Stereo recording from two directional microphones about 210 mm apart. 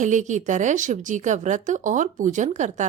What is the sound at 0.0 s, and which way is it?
A woman's voice, 35° right (ahead or behind).